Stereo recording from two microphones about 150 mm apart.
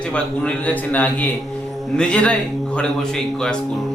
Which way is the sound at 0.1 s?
10° left (ahead or behind).